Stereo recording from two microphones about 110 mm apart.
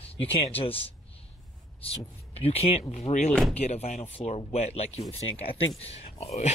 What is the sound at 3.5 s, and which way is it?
Speech, 75° left (ahead or behind).